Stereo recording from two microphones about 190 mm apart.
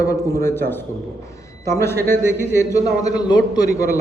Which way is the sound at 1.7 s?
15° left (ahead or behind).